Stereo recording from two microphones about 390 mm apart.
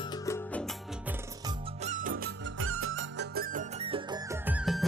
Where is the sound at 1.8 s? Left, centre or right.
Centre.